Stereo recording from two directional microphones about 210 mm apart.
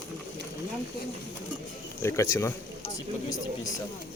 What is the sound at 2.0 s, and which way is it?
Speech, 15° left (ahead or behind).